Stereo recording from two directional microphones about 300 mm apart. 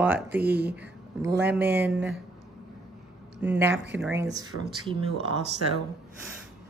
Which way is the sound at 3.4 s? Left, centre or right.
Centre.